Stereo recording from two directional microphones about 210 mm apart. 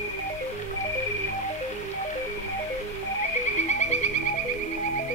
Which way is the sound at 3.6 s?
35° left (ahead or behind).